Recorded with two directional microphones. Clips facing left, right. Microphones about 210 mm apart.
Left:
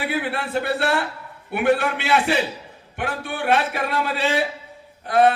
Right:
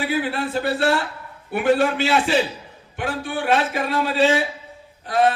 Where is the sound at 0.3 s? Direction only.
60° left (ahead or behind).